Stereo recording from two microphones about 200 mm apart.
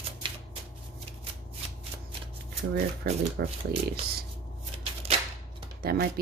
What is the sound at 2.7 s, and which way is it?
Speech, 50° right (ahead or behind).